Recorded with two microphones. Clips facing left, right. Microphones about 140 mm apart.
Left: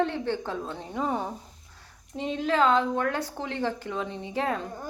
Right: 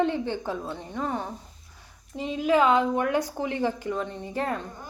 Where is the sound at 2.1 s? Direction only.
5° right (ahead or behind).